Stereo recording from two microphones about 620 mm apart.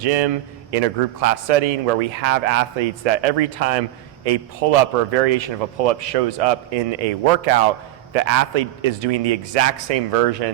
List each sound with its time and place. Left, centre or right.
0.0 s a man's voice: right